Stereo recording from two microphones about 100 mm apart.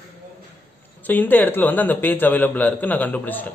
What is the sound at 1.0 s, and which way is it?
Speech, 15° left (ahead or behind).